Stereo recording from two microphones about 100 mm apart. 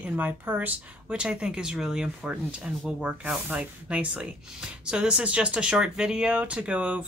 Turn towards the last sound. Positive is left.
turn(degrees=-10)  # may be behind; listen again after turning